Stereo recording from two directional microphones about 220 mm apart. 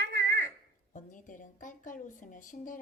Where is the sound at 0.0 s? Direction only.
50° right (ahead or behind).